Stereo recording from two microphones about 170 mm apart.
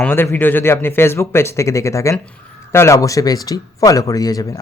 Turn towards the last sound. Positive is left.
turn(degrees=20)  # may be behind; listen again after turning